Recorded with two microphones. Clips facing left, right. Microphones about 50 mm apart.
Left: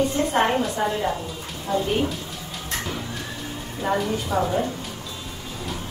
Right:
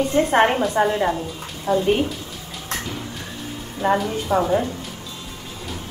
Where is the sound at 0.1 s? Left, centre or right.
Right.